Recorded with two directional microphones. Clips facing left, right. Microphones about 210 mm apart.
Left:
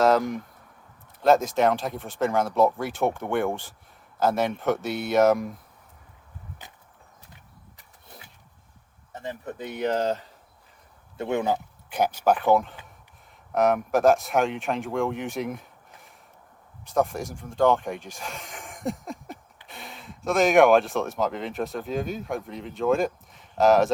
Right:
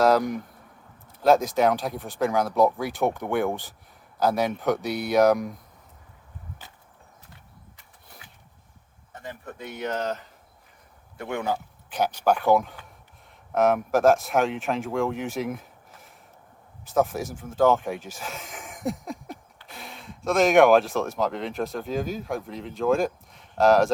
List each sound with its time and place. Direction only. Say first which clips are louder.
0.0 s speech: even; centre (ahead or behind)
9.1 s speech: left 4 dB; 25° left (ahead or behind); by 23.9 s centre (ahead or behind)